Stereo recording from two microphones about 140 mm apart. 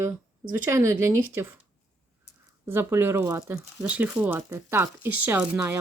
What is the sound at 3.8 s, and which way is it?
Speech, 10° right (ahead or behind).